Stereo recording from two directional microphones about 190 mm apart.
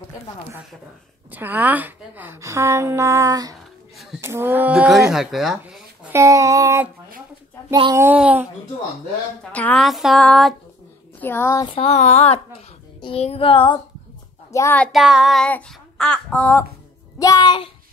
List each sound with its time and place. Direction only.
1.3 s a woman's voice: 10° right (ahead or behind)
5.1 s child singing: centre (ahead or behind)
6.1 s a woman's voice: 15° right (ahead or behind)
8.0 s a woman's voice: 10° right (ahead or behind)
9.5 s child singing: 5° left (ahead or behind)
11.1 s a child's voice: 10° left (ahead or behind)
11.7 s a sound: 35° left (ahead or behind)
13.0 s child singing: 30° left (ahead or behind)
14.5 s child singing: 10° left (ahead or behind)
17.2 s child singing: 20° left (ahead or behind)